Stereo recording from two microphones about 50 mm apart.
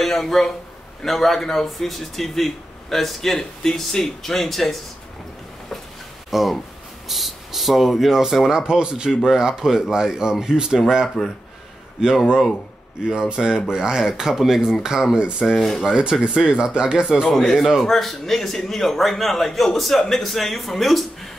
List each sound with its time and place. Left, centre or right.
0.0 s speech: centre
6.3 s speech: centre
11.2 s speech: centre
12.0 s speech: centre
13.3 s speech: centre
15.6 s speech: centre
15.9 s speech: centre
17.3 s speech: centre